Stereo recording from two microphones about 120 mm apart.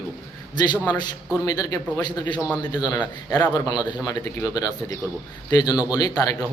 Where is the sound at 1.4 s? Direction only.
30° left (ahead or behind).